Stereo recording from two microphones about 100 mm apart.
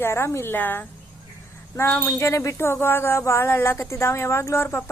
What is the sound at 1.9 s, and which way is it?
Speech, 20° left (ahead or behind).